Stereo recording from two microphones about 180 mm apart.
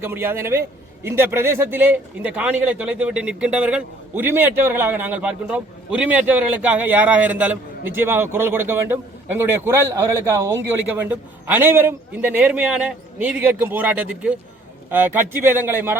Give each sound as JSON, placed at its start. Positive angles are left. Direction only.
{"t": 0.0, "sound": "speech", "side_deg": -10}